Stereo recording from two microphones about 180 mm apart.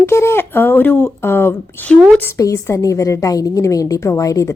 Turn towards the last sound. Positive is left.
turn(degrees=20)  # may be behind; listen again after turning